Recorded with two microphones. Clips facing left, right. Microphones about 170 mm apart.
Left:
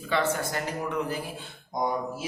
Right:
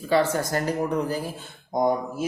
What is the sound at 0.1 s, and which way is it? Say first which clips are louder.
A man's voice: right 5 dB; 40° right (ahead or behind).